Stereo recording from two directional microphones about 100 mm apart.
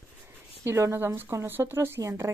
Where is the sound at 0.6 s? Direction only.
30° right (ahead or behind).